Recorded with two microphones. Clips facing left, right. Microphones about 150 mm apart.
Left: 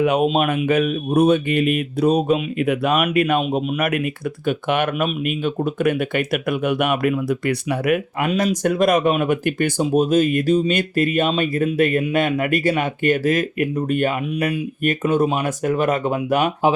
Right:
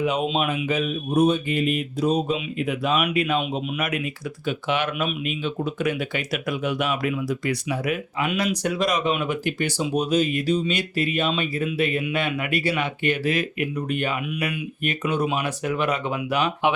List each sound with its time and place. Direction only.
0.0 s speech: 55° left (ahead or behind)
8.3 s speech: 35° left (ahead or behind)
8.6 s speech: 50° left (ahead or behind)